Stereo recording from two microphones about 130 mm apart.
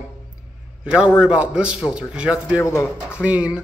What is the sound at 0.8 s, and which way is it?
A man's voice, 10° right (ahead or behind).